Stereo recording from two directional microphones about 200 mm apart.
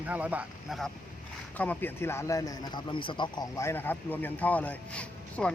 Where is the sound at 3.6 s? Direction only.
10° left (ahead or behind).